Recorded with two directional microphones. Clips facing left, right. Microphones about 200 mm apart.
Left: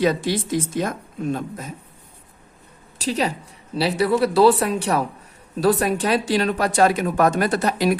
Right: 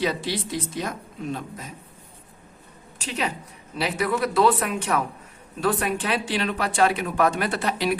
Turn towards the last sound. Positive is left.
turn(degrees=45)  # may be behind; listen again after turning